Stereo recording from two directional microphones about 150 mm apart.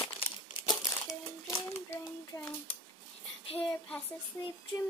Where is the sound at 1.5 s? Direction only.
20° left (ahead or behind).